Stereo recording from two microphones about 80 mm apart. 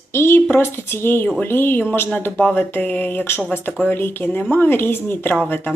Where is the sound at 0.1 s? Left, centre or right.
Left.